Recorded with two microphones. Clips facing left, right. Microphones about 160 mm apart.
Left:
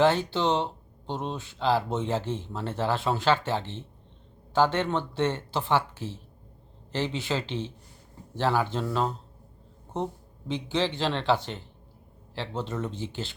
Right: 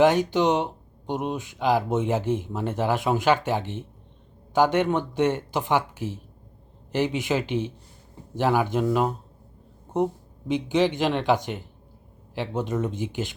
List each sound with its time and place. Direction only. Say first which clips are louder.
0.0 s speech: right 4 dB; 15° right (ahead or behind)
10.5 s speech: right 6 dB; 15° right (ahead or behind)